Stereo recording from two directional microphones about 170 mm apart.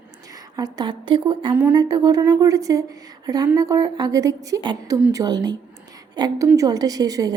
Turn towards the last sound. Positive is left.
turn(degrees=-20)  # may be behind; listen again after turning